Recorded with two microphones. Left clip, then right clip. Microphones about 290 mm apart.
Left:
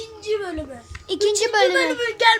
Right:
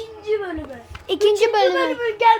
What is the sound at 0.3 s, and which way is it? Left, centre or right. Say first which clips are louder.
Speech: right 2 dB; left.